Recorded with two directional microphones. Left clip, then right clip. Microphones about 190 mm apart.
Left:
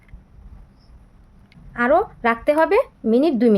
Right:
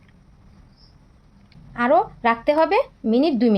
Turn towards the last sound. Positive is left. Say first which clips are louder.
# left 2 dB
turn(degrees=20)  # may be behind; listen again after turning